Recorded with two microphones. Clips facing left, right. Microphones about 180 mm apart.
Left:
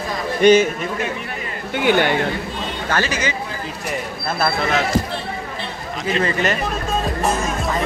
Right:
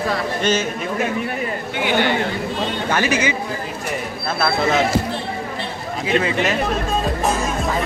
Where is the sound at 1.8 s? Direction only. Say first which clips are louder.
Left 3 dB; 50° left (ahead or behind).